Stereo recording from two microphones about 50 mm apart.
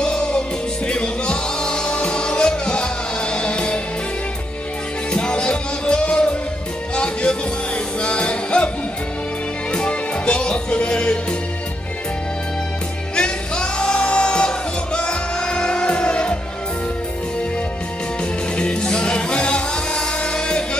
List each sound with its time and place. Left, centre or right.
0.0 s music: centre
5.1 s music: centre
9.7 s music: left
13.1 s music: centre
18.6 s music: centre